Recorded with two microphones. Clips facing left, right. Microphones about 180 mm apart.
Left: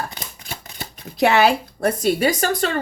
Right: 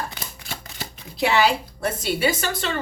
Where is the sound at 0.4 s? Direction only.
50° left (ahead or behind).